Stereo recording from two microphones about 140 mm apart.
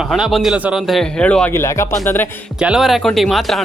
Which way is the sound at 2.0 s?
15° left (ahead or behind).